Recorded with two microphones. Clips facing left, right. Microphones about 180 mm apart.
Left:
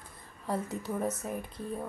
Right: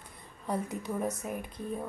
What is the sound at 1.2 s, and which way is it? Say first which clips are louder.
Speech: even; 10° right (ahead or behind).